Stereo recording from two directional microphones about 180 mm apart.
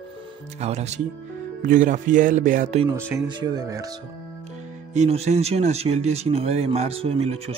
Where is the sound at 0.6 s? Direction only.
40° right (ahead or behind).